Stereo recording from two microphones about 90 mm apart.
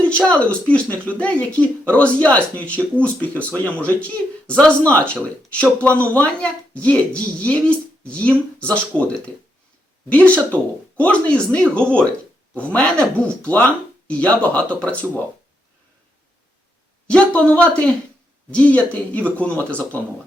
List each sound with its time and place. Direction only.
0.2 s speech: 10° left (ahead or behind)
17.1 s speech: 10° left (ahead or behind)